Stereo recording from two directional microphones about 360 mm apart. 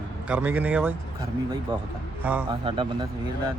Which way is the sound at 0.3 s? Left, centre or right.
Centre.